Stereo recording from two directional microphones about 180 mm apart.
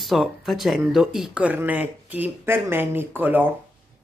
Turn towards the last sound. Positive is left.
turn(degrees=-10)  # may be behind; listen again after turning